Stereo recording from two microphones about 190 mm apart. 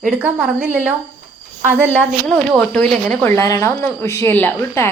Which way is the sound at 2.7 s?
5° left (ahead or behind).